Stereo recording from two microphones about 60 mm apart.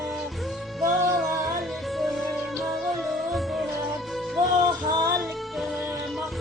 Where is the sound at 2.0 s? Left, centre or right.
Centre.